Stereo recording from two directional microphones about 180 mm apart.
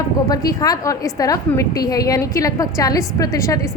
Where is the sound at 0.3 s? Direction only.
20° left (ahead or behind).